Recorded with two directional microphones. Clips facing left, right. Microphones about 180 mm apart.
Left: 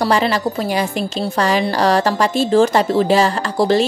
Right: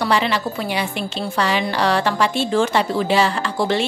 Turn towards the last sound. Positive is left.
turn(degrees=40)  # may be behind; listen again after turning